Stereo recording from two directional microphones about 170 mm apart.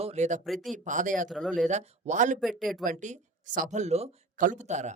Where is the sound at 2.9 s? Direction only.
45° right (ahead or behind).